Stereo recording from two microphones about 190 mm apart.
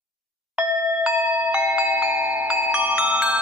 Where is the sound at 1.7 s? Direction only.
5° right (ahead or behind).